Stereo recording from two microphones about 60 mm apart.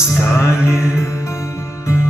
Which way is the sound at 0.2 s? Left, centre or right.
Left.